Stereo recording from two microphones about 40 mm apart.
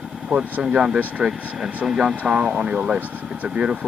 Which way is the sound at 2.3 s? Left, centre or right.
Right.